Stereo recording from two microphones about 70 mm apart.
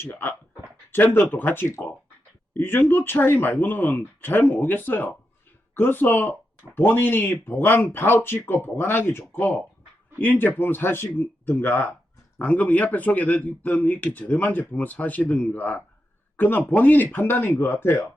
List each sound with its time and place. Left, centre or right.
0.0 s speech: left